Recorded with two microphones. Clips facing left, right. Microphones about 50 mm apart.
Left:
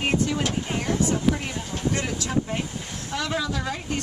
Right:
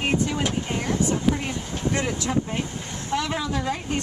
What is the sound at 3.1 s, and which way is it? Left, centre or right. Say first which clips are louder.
Speech: right 2 dB; right.